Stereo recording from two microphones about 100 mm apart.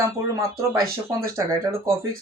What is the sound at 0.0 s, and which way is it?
Speech, 30° right (ahead or behind).